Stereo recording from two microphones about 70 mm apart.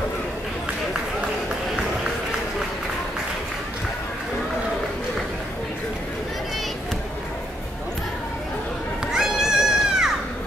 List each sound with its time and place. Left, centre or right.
9.0 s music: centre